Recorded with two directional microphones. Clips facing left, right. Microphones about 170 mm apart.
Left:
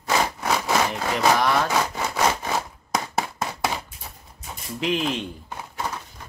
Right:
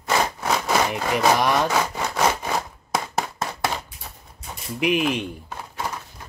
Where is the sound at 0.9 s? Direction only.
15° right (ahead or behind).